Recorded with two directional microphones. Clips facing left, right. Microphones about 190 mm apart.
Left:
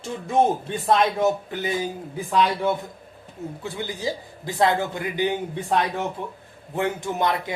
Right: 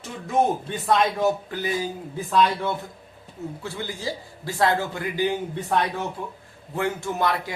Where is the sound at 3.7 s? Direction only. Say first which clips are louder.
Left 5 dB; 20° left (ahead or behind).